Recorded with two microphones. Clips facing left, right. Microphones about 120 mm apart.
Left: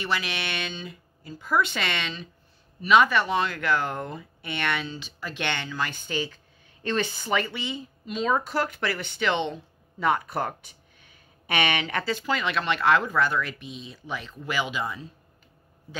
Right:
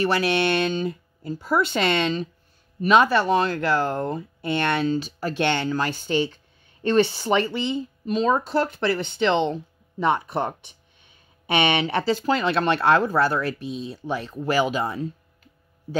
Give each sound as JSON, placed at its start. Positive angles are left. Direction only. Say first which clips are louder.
{"t": 0.0, "sound": "speech", "louder": "right 9 dB", "side_deg": -40}
{"t": 1.4, "sound": "speech", "louder": "right 4 dB", "side_deg": -35}